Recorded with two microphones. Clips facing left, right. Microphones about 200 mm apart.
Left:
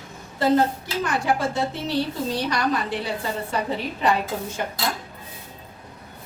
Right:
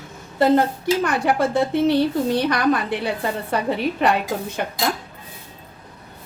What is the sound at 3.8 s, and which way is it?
Speech, 65° right (ahead or behind).